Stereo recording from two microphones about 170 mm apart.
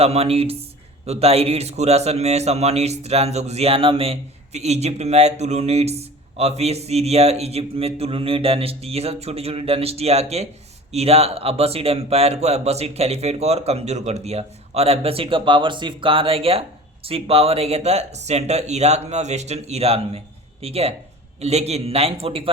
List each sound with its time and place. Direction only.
0.0 s speech: 35° right (ahead or behind)